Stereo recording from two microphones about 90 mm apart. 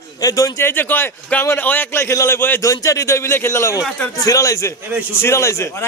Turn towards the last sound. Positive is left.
turn(degrees=30)  # may be behind; listen again after turning